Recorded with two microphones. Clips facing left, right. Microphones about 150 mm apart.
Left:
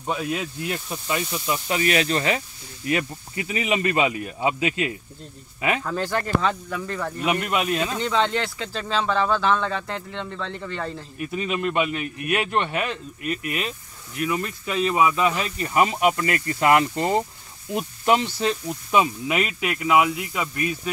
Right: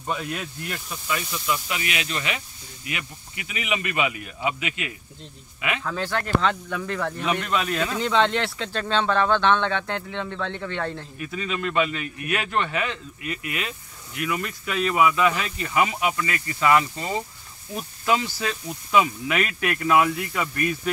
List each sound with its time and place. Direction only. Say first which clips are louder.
0.0 s speech: left 3 dB; 15° left (ahead or behind)
0.8 s speech: left 3 dB; 30° left (ahead or behind)
5.9 s speech: left 1 dB; 10° left (ahead or behind)
8.0 s speech: right 4 dB; centre (ahead or behind)
12.4 s speech: left 1 dB; 30° left (ahead or behind); by 17.1 s 55° left (ahead or behind)
18.0 s speech: left 3 dB; 25° left (ahead or behind)